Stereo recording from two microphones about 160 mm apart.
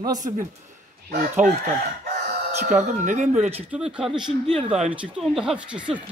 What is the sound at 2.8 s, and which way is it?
Speech, 50° right (ahead or behind).